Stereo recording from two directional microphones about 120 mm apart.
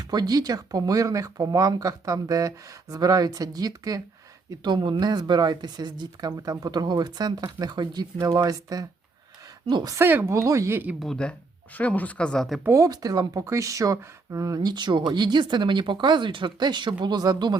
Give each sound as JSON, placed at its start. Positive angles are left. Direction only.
{"t": 0.0, "sound": "speech", "side_deg": -35}
{"t": 10.0, "sound": "speech", "side_deg": -20}
{"t": 11.0, "sound": "speech", "side_deg": 5}
{"t": 12.6, "sound": "speech", "side_deg": -25}